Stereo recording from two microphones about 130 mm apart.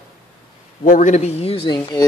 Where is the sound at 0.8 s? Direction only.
80° left; by 1.8 s 45° left (ahead or behind).